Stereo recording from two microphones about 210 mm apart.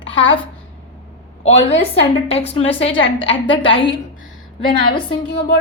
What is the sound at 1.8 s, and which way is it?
A woman's voice, 25° left (ahead or behind).